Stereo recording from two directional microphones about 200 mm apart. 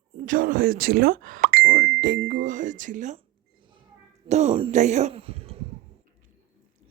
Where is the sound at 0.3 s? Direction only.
45° right (ahead or behind).